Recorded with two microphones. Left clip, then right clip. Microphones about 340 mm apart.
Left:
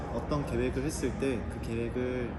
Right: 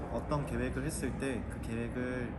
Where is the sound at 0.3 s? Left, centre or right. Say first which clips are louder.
Left 5 dB; centre.